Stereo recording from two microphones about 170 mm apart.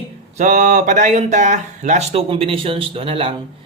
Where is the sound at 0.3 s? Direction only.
45° right (ahead or behind).